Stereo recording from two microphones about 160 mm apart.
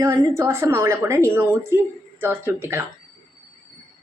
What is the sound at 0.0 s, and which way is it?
A woman's voice, 20° right (ahead or behind).